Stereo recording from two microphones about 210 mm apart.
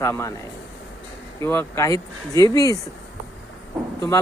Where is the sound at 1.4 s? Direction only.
10° left (ahead or behind).